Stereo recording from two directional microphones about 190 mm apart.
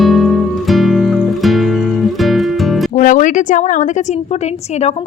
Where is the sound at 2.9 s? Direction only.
45° left (ahead or behind).